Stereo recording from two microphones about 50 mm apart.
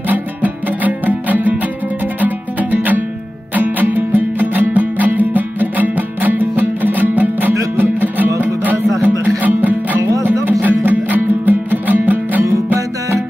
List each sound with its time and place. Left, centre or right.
0.1 s music: right